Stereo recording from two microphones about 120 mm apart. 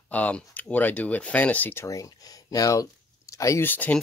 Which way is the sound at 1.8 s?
30° left (ahead or behind).